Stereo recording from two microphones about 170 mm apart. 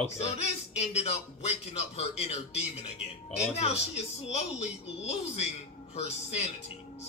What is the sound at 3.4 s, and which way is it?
Speech, 40° left (ahead or behind).